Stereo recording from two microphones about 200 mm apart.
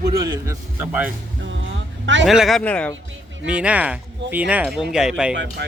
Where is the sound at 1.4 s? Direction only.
70° right (ahead or behind).